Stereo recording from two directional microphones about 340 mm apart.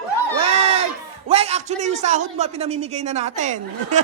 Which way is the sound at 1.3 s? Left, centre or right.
Centre.